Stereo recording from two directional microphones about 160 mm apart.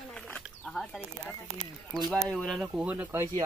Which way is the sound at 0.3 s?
5° left (ahead or behind).